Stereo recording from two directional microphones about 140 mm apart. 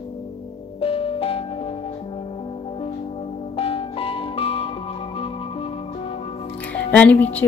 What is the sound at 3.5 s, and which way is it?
Music, 45° left (ahead or behind).